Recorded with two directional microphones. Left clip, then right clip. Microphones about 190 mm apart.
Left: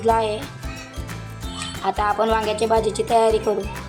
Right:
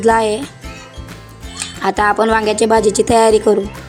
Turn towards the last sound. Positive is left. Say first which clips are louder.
# right 7 dB
turn(degrees=-40)  # may be behind; listen again after turning